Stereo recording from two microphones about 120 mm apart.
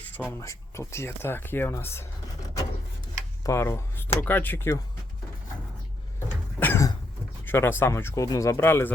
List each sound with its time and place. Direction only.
0.3 s speech: 25° left (ahead or behind)
3.4 s speech: 20° left (ahead or behind)
6.6 s a sound: 15° left (ahead or behind)
7.4 s speech: 20° left (ahead or behind)